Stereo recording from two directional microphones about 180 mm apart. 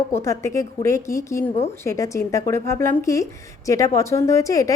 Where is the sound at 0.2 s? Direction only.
15° left (ahead or behind).